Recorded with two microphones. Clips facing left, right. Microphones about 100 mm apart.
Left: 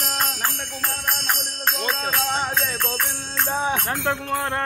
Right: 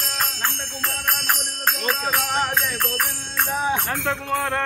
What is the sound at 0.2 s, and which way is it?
Jingle bell, 5° left (ahead or behind).